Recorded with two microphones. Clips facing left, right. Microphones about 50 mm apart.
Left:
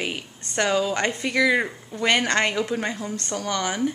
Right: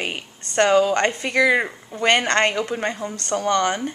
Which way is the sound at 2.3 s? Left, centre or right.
Centre.